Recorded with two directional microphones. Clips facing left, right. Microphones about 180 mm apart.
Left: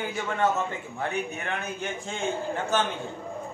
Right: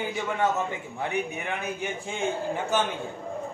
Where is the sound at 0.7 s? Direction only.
15° right (ahead or behind).